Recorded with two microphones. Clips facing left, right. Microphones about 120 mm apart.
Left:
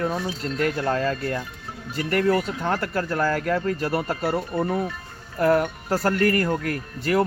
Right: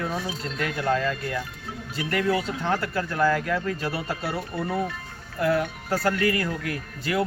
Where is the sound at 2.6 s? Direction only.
45° left (ahead or behind).